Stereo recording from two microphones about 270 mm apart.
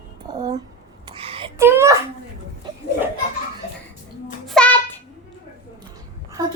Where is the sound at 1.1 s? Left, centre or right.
Right.